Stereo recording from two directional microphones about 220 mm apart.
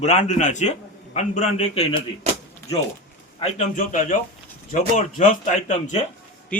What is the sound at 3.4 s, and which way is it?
A man's voice, 30° left (ahead or behind).